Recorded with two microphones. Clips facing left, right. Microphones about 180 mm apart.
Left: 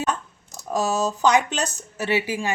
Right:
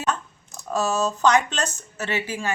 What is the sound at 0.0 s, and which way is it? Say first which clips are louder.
Speech: left 1 dB; 10° left (ahead or behind).